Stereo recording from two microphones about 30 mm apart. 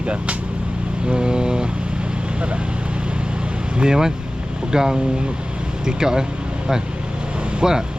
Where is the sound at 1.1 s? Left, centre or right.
Right.